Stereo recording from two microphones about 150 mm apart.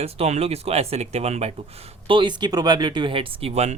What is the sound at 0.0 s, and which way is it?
Speech, 45° right (ahead or behind).